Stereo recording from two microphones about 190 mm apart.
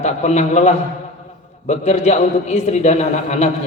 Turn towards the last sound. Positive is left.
turn(degrees=35)  # may be behind; listen again after turning